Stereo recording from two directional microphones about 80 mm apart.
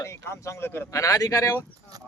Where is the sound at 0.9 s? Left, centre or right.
Left.